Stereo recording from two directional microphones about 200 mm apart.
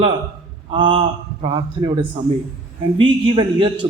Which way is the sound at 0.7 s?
25° right (ahead or behind).